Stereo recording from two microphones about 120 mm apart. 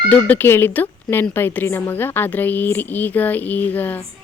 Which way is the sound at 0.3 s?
20° left (ahead or behind).